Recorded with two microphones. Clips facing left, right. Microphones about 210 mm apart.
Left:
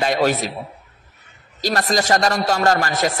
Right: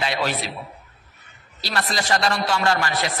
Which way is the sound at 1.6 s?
45° left (ahead or behind).